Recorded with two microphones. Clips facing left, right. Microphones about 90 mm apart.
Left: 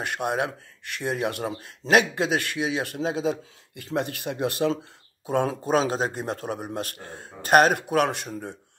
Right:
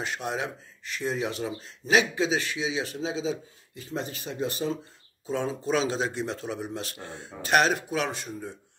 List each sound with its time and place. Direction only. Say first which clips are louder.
0.0 s a man's voice: left 5 dB; 55° left (ahead or behind)